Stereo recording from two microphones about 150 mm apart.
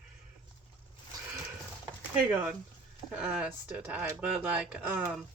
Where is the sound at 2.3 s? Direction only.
10° right (ahead or behind).